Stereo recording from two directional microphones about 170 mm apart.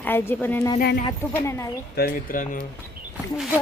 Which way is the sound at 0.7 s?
60° left (ahead or behind).